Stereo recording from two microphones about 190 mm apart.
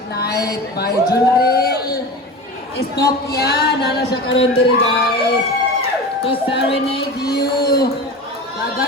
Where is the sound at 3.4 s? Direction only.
60° left (ahead or behind).